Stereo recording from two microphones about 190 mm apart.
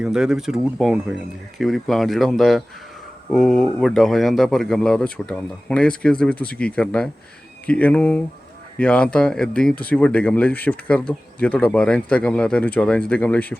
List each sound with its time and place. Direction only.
0.0 s speech: 5° right (ahead or behind)